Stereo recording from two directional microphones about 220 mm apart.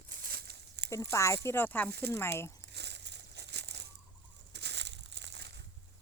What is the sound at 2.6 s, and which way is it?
Crumpling, 50° right (ahead or behind).